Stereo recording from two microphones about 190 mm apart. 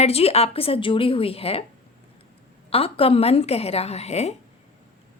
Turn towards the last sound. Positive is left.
turn(degrees=35)  # may be behind; listen again after turning